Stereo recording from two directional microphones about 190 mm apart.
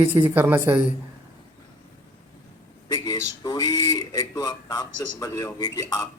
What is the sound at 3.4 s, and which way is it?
A man's voice, 20° left (ahead or behind).